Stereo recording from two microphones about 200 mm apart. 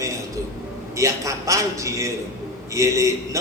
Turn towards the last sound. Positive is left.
turn(degrees=-15)  # may be behind; listen again after turning